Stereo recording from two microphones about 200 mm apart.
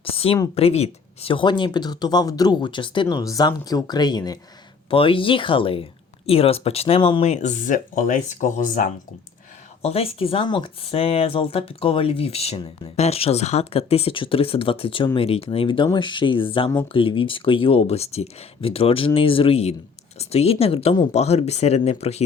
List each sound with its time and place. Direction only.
0.0 s a sound: 30° left (ahead or behind)
0.5 s speech: 30° left (ahead or behind)
9.8 s speech: 30° left (ahead or behind)